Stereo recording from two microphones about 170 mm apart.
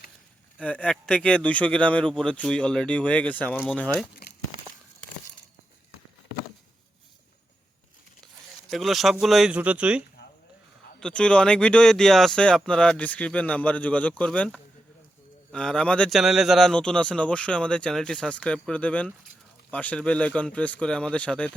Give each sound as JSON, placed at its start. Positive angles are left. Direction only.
{"t": 0.6, "sound": "a man's voice", "side_deg": 5}
{"t": 4.2, "sound": "crumpling", "side_deg": 70}
{"t": 8.7, "sound": "speech", "side_deg": 0}
{"t": 11.0, "sound": "a man's voice", "side_deg": 5}